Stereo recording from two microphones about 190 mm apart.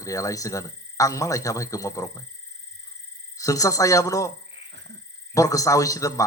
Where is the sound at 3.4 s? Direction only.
15° left (ahead or behind).